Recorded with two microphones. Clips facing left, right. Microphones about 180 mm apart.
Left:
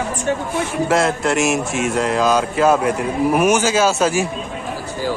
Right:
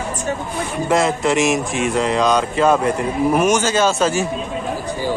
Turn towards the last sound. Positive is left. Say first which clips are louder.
# left 1 dB
turn(degrees=10)  # may be behind; listen again after turning